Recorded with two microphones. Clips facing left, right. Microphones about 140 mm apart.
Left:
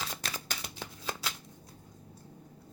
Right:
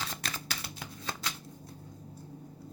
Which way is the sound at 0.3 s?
5° left (ahead or behind).